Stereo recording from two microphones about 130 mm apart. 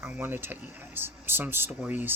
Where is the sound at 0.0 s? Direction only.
15° right (ahead or behind).